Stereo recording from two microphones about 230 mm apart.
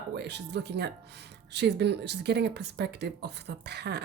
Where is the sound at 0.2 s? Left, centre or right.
Right.